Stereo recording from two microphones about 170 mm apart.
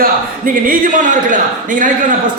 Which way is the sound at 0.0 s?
55° right (ahead or behind).